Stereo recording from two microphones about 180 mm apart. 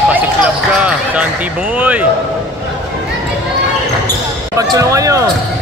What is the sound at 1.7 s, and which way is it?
Speech, 10° right (ahead or behind).